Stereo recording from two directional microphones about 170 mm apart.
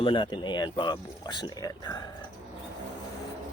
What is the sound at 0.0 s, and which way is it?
Speech, 30° left (ahead or behind).